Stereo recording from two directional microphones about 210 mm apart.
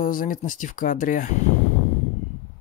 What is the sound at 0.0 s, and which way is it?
Speech, 40° left (ahead or behind).